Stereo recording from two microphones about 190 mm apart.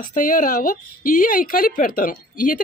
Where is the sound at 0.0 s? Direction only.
45° left (ahead or behind).